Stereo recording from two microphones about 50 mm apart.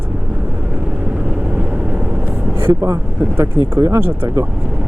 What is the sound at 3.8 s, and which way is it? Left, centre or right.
Speech, right.